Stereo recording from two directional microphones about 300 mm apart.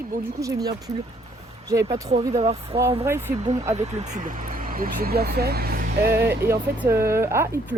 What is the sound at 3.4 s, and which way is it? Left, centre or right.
Speech, right.